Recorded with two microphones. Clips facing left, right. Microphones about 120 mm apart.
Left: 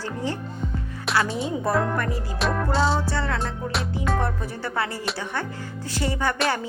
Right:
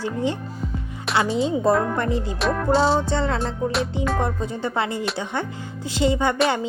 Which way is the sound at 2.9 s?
20° right (ahead or behind).